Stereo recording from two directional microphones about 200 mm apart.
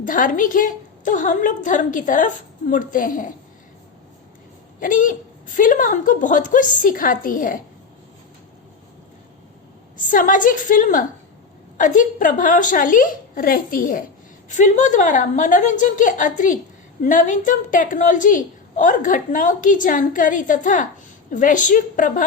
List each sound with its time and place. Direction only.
0.0 s a woman's voice: 40° left (ahead or behind)
4.8 s a woman's voice: 40° left (ahead or behind)
10.1 s a woman's voice: 40° left (ahead or behind)